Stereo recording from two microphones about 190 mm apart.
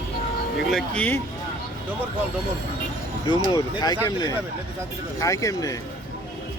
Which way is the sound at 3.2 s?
25° left (ahead or behind).